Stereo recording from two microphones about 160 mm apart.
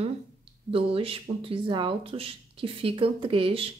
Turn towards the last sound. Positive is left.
turn(degrees=-35)  # may be behind; listen again after turning